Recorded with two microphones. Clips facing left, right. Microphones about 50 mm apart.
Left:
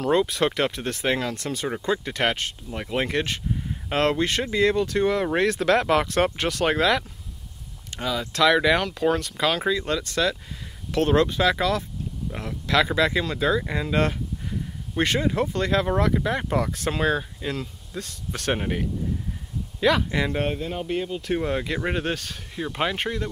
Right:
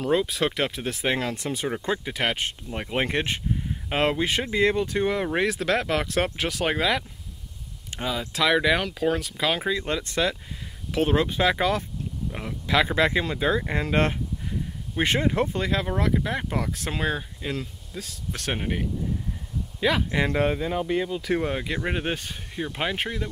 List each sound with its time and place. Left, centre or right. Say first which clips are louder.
0.0 s speech: left 2 dB; centre
2.4 s speech: right 1 dB; centre
3.6 s speech: left 2 dB; centre
7.9 s a sound: left 1 dB; centre
8.2 s speech: left 3 dB; centre
9.8 s speech: left 1 dB; centre
10.9 s speech: left 3 dB; centre
12.9 s speech: even; right
15.4 s speech: left 3 dB; centre
21.4 s speech: left 1 dB; centre
22.0 s speech: left 1 dB; centre
22.7 s speech: left 3 dB; centre